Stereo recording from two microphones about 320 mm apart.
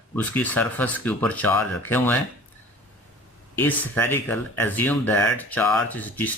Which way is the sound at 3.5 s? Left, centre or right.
Centre.